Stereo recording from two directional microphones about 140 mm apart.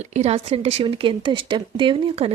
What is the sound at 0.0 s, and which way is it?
Speech, 55° right (ahead or behind).